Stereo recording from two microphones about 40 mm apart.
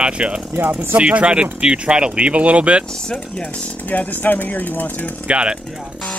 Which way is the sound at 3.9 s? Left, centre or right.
Left.